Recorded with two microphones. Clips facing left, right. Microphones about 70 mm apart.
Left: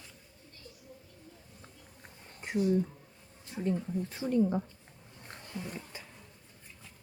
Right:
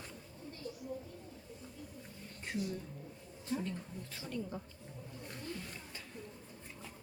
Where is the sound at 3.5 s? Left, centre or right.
Left.